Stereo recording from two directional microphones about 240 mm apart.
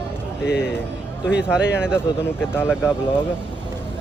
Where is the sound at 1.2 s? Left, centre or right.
Centre.